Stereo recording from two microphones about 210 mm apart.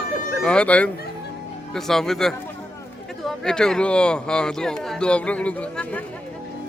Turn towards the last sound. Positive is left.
turn(degrees=5)  # may be behind; listen again after turning